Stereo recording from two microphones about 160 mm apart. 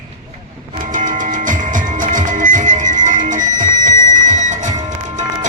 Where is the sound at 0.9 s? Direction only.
55° right (ahead or behind).